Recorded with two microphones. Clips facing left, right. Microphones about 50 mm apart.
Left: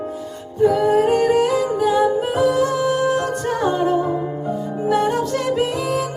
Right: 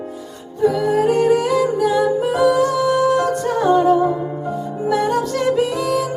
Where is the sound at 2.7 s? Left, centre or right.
Left.